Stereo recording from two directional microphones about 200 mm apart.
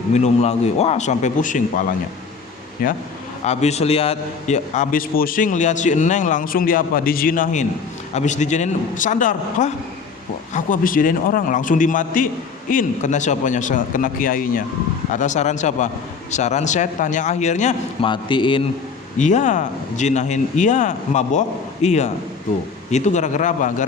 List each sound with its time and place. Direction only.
0.1 s a man's voice: 35° left (ahead or behind)
2.8 s a man's voice: 45° left (ahead or behind)
3.4 s a man's voice: 35° left (ahead or behind)
18.1 s a man's voice: 25° left (ahead or behind)
19.2 s a man's voice: 35° left (ahead or behind)